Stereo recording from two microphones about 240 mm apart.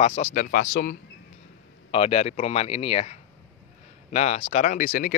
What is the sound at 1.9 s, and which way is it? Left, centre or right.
Speech, left.